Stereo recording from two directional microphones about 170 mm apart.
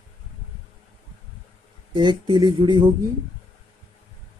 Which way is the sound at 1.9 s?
25° right (ahead or behind).